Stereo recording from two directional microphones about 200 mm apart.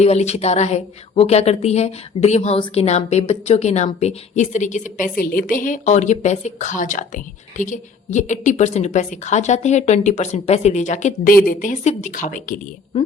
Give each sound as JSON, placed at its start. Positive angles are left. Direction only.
{"t": 0.0, "sound": "a woman's voice", "side_deg": 30}